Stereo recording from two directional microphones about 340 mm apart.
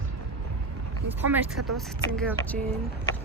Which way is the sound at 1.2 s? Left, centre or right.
Centre.